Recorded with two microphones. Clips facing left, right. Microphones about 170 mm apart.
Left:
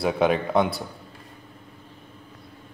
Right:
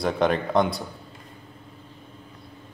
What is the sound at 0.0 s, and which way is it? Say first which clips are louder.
Speech: left 1 dB; 5° left (ahead or behind).